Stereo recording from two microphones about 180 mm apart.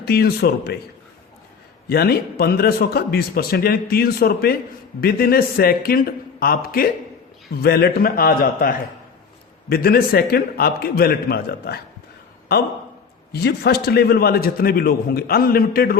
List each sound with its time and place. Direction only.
0.0 s a man's voice: 60° left (ahead or behind)
1.9 s a man's voice: 60° left (ahead or behind)
13.3 s a man's voice: 65° left (ahead or behind)